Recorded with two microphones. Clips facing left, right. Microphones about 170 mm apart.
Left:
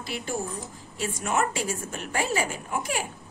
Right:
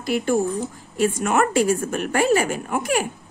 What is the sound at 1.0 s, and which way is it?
A woman's voice, 65° right (ahead or behind).